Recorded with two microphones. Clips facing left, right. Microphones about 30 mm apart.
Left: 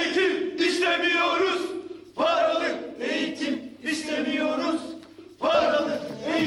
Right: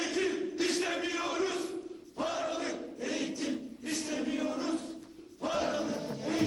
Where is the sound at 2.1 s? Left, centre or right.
Left.